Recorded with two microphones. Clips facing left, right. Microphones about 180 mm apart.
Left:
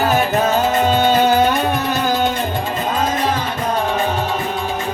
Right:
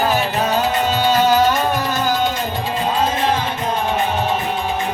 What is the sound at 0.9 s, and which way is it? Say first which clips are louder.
Music: left 1 dB; 50° left (ahead or behind).